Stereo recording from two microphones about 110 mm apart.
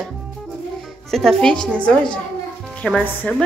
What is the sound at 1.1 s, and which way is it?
A woman's voice, 5° left (ahead or behind).